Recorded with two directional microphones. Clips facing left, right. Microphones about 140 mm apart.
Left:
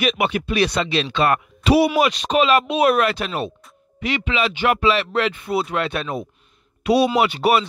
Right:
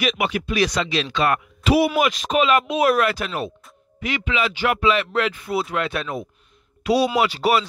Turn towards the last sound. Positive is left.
turn(degrees=25)  # may be behind; listen again after turning